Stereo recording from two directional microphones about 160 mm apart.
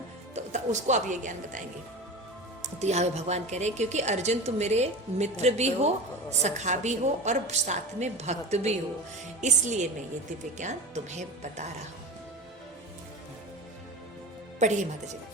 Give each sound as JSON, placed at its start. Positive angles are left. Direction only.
{"t": 0.3, "sound": "speech", "side_deg": -45}
{"t": 2.7, "sound": "a woman's voice", "side_deg": -45}
{"t": 14.6, "sound": "a woman's voice", "side_deg": -50}